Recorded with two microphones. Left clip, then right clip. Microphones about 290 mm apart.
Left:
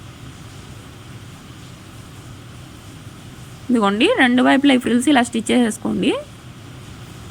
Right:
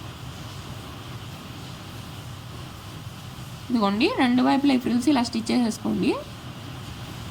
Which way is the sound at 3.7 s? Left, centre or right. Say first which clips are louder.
Left 7 dB; centre.